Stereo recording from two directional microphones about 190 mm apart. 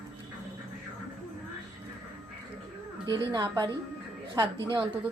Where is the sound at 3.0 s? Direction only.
25° right (ahead or behind).